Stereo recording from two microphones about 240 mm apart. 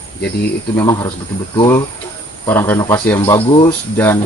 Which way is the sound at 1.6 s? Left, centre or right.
Centre.